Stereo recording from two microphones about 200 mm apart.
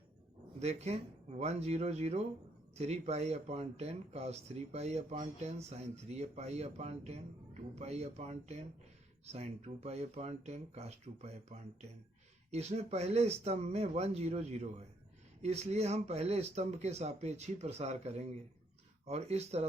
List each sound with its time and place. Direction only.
0.6 s speech: 35° right (ahead or behind)